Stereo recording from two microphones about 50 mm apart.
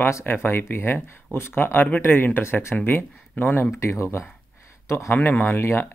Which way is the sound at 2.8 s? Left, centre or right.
Left.